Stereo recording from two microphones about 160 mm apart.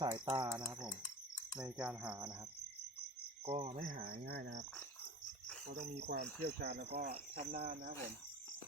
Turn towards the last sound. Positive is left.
turn(degrees=-65)  # may be behind; listen again after turning